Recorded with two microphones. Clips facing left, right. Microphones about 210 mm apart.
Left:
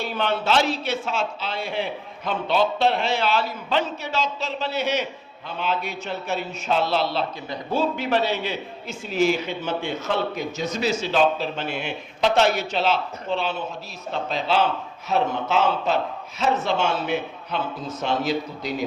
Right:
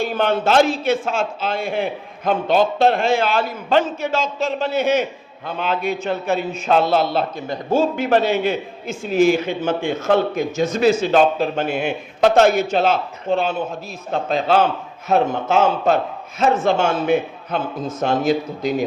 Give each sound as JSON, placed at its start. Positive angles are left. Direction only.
{"t": 0.0, "sound": "a man's voice", "side_deg": -50}